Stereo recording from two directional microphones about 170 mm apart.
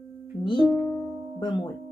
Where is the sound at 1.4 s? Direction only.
25° left (ahead or behind).